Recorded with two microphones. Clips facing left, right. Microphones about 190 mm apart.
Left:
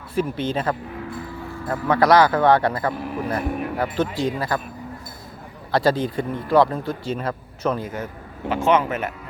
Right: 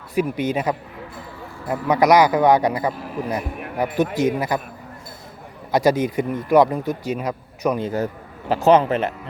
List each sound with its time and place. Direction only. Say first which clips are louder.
0.1 s speech: right 2 dB; 15° right (ahead or behind)
5.7 s speech: right 2 dB; 20° right (ahead or behind)
7.9 s speech: right 7 dB; 35° right (ahead or behind)